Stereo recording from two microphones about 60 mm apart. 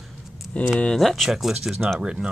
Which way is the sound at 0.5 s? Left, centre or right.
Left.